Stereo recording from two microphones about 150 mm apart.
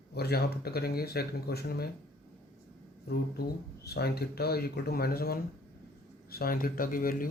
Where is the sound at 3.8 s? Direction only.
90° left; by 7.3 s 70° left (ahead or behind).